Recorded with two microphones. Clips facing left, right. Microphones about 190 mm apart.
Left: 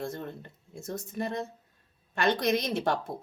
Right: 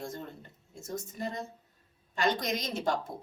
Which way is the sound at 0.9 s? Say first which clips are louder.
Left 3 dB; 60° left (ahead or behind).